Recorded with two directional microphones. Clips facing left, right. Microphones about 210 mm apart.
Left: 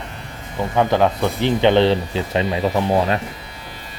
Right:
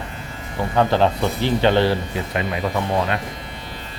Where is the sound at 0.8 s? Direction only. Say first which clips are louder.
Left 1 dB; 15° left (ahead or behind); by 2.6 s 30° left (ahead or behind).